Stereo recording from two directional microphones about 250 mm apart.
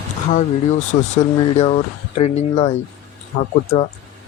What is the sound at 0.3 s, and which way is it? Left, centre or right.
Speech, left.